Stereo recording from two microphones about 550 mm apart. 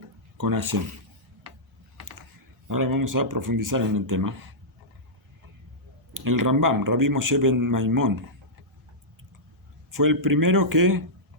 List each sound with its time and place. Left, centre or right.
0.3 s a man's voice: right
2.6 s a man's voice: right
6.1 s a man's voice: right
9.9 s a man's voice: right